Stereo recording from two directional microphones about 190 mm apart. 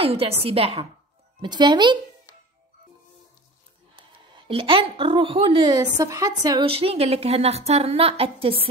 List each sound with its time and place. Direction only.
0.0 s a woman's voice: 30° right (ahead or behind)
3.9 s a woman's voice: 25° right (ahead or behind)